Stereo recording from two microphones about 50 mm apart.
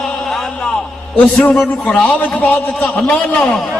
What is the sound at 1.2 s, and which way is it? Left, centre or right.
Speech, left.